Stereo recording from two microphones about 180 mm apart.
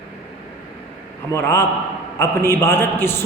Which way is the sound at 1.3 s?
15° left (ahead or behind).